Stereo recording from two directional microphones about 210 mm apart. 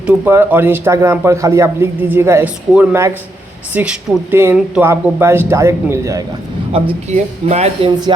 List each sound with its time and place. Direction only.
0.0 s a man's voice: 10° right (ahead or behind)
6.7 s speech: 30° right (ahead or behind)